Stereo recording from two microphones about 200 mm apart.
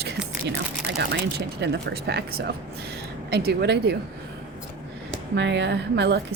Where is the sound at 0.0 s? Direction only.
55° right (ahead or behind).